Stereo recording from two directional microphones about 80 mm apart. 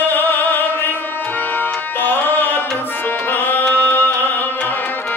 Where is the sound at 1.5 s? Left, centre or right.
Left.